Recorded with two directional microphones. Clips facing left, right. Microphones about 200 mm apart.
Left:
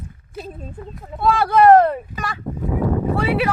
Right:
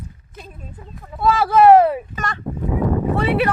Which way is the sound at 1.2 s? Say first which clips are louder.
Right 1 dB; centre (ahead or behind).